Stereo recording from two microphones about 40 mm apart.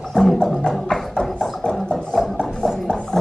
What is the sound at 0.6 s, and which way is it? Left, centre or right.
Music, centre.